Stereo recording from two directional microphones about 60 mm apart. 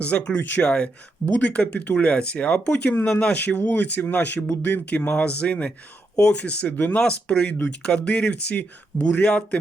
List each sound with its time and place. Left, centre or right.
0.0 s speech: centre
0.3 s speech: left
0.6 s speech: centre
6.7 s speech: left
7.0 s speech: centre